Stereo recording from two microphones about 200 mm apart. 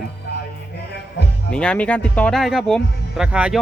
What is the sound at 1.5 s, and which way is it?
Speech, 5° left (ahead or behind).